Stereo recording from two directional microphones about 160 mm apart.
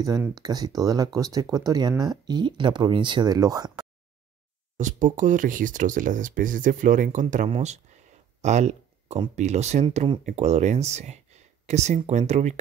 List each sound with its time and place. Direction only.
0.3 s speech: 25° right (ahead or behind)
4.7 s speech: 50° right (ahead or behind)
8.4 s a sound: 45° right (ahead or behind)
9.3 s speech: 45° right (ahead or behind)
10.2 s speech: 45° right (ahead or behind)